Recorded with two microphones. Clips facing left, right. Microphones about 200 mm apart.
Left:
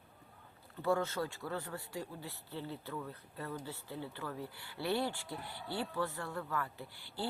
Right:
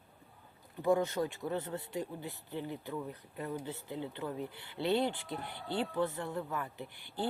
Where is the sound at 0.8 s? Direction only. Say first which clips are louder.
Right 4 dB; 15° right (ahead or behind).